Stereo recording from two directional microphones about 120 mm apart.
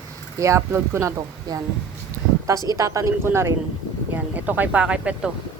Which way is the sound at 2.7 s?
25° right (ahead or behind).